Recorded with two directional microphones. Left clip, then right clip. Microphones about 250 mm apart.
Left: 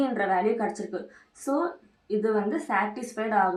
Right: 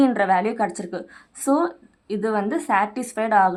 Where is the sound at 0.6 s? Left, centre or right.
Right.